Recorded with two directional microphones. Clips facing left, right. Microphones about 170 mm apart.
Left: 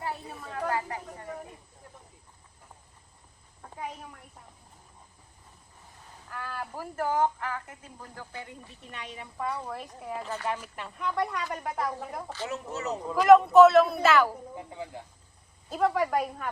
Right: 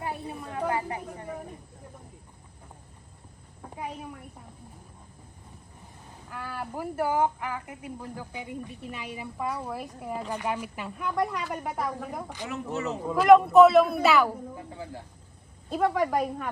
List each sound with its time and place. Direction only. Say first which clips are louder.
0.0 s a sound: right 2 dB; 15° right (ahead or behind)
3.6 s a sound: right 2 dB; 10° right (ahead or behind)
6.2 s a woman's voice: right 1 dB; 10° right (ahead or behind)
12.5 s speech: right 3 dB; 40° left (ahead or behind)
13.1 s speech: right 1 dB; centre (ahead or behind)
14.5 s speech: even; 20° left (ahead or behind)
15.7 s speech: right 1 dB; centre (ahead or behind)